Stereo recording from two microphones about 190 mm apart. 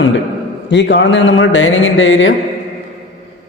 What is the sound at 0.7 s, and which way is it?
A man's voice, 65° left (ahead or behind).